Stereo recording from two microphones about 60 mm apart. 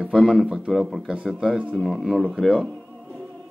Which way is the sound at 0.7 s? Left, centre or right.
Centre.